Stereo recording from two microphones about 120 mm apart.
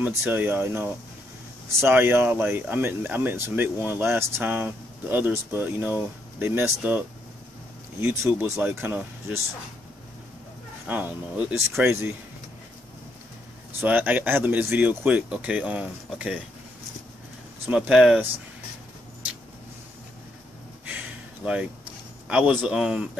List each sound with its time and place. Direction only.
0.3 s speech: 15° right (ahead or behind)
8.0 s speech: 20° right (ahead or behind)
10.9 s speech: 15° right (ahead or behind)
13.7 s speech: 15° right (ahead or behind)
17.6 s speech: 10° right (ahead or behind)
22.3 s speech: 10° right (ahead or behind)